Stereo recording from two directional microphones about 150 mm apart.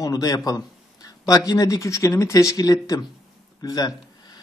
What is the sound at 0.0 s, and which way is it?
Speech, 25° left (ahead or behind).